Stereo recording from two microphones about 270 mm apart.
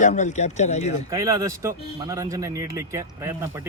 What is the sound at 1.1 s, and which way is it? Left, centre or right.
A man's voice, centre.